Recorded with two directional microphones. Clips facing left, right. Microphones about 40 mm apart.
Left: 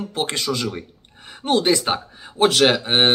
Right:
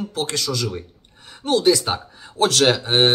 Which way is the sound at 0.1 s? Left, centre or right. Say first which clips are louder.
Left 4 dB; left.